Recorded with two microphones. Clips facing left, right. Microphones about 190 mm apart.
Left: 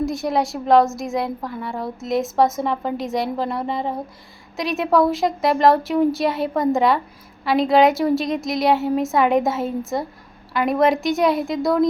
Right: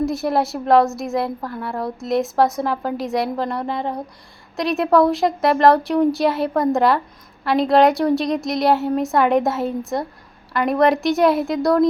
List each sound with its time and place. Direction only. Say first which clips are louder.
0.0 s a woman's voice: right 1 dB; centre (ahead or behind)